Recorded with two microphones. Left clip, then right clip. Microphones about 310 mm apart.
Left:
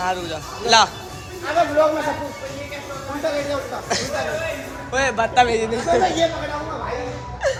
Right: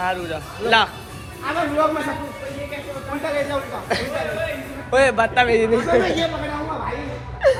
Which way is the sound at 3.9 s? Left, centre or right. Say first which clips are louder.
Even; centre.